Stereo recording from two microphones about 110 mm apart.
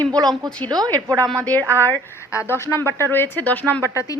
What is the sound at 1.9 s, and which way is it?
Speech, 25° left (ahead or behind).